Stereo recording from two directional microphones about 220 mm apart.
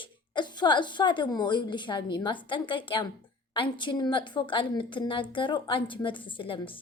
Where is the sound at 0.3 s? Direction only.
20° left (ahead or behind).